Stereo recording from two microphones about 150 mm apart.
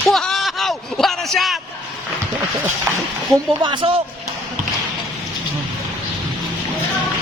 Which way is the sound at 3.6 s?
30° right (ahead or behind).